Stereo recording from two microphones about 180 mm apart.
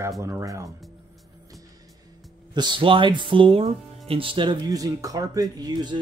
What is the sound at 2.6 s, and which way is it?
Speech, 25° right (ahead or behind).